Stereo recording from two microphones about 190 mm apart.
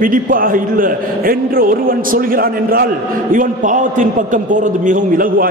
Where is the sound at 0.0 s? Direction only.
45° right (ahead or behind).